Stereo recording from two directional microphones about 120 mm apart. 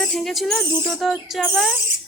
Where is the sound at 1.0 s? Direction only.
Centre (ahead or behind).